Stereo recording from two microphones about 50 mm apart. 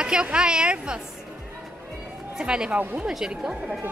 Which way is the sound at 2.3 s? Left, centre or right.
Centre.